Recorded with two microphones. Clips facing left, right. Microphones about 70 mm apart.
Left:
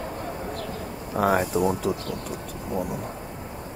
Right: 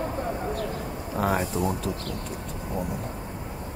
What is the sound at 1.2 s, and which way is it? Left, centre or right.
Speech, centre.